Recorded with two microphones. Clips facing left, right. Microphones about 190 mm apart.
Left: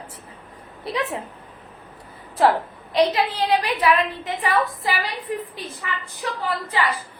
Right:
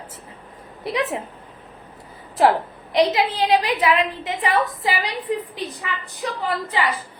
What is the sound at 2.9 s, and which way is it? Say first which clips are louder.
A woman's voice: right 1 dB; 20° right (ahead or behind).